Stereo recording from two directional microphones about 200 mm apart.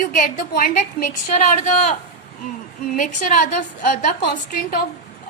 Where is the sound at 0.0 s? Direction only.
40° left (ahead or behind).